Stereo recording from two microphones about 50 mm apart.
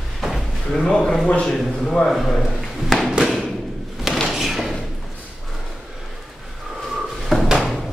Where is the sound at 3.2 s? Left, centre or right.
Centre.